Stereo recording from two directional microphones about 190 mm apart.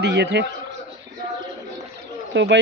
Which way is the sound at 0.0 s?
65° right (ahead or behind).